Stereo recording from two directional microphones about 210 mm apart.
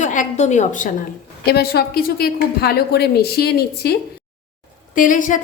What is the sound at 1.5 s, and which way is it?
A woman's voice, 50° left (ahead or behind).